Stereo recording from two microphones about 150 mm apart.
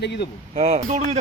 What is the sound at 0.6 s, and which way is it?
Speech, 45° right (ahead or behind).